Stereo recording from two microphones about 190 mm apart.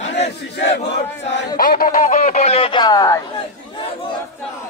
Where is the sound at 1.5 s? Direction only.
45° left (ahead or behind); by 3.2 s 20° left (ahead or behind).